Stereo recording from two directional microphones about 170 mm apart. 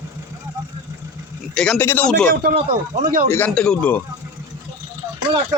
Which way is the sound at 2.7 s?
55° right (ahead or behind).